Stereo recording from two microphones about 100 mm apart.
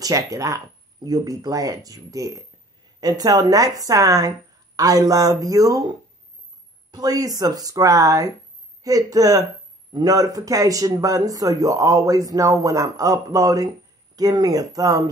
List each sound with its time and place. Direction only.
0.0 s a man's voice: 35° right (ahead or behind)